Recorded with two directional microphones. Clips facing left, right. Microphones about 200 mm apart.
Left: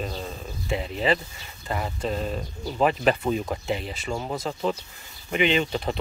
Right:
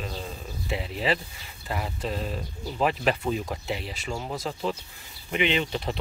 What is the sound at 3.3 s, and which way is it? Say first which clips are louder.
Speech: left 3 dB; centre (ahead or behind).